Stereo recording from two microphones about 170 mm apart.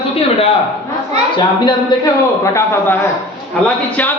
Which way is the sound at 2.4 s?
15° left (ahead or behind).